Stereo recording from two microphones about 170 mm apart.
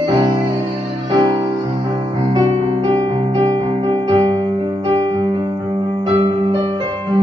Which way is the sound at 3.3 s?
25° right (ahead or behind).